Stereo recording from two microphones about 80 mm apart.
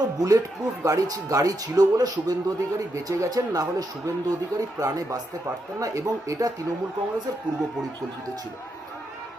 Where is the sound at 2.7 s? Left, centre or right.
Right.